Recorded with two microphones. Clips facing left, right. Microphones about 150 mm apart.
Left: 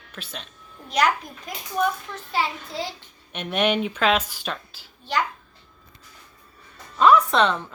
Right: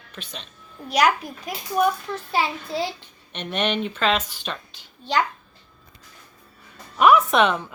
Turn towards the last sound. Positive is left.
turn(degrees=-15)  # may be behind; listen again after turning